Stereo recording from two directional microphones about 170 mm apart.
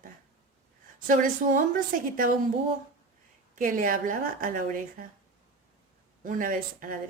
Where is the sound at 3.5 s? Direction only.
55° right (ahead or behind).